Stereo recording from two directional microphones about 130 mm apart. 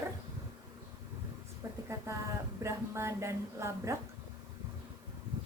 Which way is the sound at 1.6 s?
25° right (ahead or behind).